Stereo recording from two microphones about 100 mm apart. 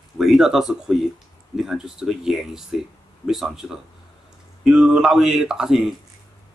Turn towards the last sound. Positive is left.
turn(degrees=-5)  # may be behind; listen again after turning